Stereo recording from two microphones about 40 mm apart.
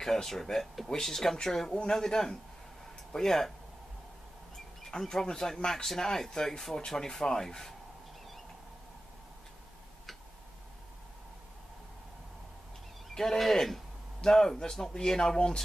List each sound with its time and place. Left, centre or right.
0.0 s speech: centre
1.7 s speech: left
2.0 s speech: centre
4.8 s speech: centre
13.1 s speech: centre